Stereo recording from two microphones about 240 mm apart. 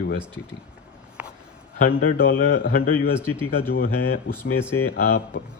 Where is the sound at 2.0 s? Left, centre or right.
Left.